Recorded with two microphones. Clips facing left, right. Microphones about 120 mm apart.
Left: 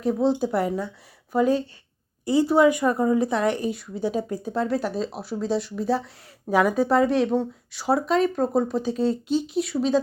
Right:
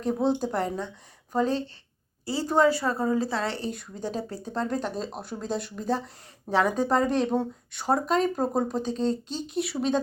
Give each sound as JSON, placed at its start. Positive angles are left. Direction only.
{"t": 0.0, "sound": "a woman's voice", "side_deg": 0}